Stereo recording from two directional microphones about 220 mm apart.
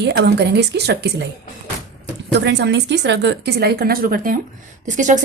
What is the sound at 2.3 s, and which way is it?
Speech, 55° right (ahead or behind).